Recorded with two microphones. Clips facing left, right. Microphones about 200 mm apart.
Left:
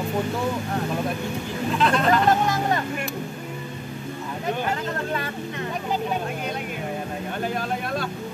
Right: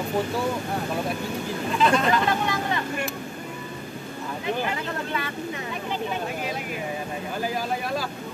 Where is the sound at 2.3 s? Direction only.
45° left (ahead or behind).